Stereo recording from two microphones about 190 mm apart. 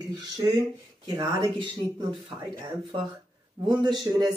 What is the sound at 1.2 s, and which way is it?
Speech, 20° right (ahead or behind).